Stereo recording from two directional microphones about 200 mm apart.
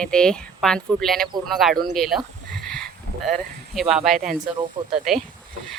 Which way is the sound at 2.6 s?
5° left (ahead or behind).